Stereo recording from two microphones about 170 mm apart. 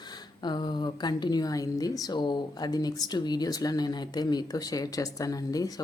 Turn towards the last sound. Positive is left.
turn(degrees=20)  # may be behind; listen again after turning